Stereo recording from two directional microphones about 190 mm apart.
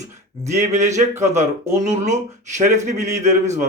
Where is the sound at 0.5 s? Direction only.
35° right (ahead or behind).